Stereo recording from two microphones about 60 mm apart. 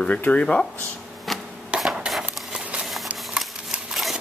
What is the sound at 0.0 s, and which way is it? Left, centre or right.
Speech, left.